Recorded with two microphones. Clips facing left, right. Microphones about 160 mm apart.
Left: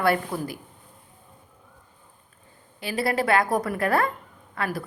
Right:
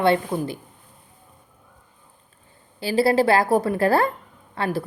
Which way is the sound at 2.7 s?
30° right (ahead or behind).